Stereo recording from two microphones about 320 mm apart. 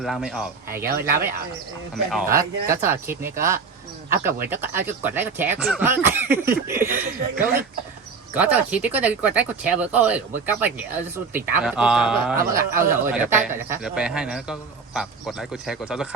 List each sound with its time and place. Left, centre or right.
0.0 s speech: centre
0.9 s speech: right
2.0 s speech: centre
8.3 s speech: centre